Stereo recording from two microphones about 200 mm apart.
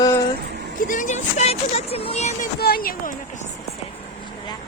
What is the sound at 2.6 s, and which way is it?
Speech, 50° left (ahead or behind).